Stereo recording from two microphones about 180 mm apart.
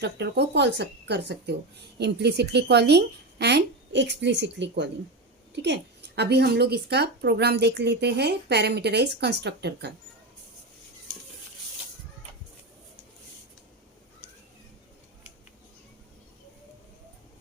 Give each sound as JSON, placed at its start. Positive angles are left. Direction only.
{"t": 0.0, "sound": "a woman's voice", "side_deg": -70}